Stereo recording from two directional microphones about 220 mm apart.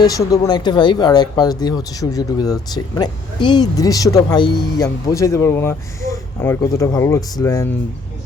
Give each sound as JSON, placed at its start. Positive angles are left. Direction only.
{"t": 0.0, "sound": "speech", "side_deg": 15}